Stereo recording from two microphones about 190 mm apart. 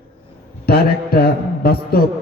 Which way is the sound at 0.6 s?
55° left (ahead or behind).